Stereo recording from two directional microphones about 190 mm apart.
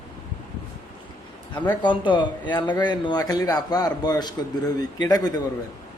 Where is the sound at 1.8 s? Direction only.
25° left (ahead or behind).